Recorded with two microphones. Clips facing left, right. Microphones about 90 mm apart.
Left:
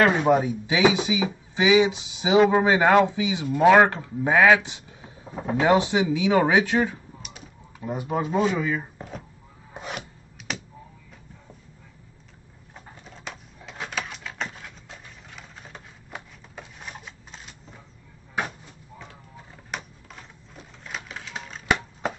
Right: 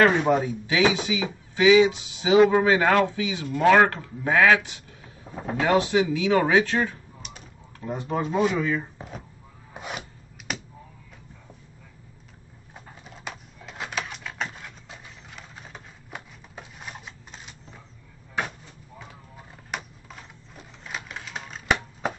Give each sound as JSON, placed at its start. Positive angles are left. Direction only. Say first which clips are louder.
{"t": 0.0, "sound": "speech", "louder": "even", "side_deg": 10}
{"t": 7.2, "sound": "typing", "louder": "even", "side_deg": 5}
{"t": 8.9, "sound": "speech", "louder": "left 1 dB", "side_deg": 0}
{"t": 9.8, "sound": "filing", "louder": "left 1 dB", "side_deg": 0}
{"t": 12.7, "sound": "a sound", "louder": "even", "side_deg": -5}
{"t": 19.7, "sound": "typewriter", "louder": "right 1 dB", "side_deg": 0}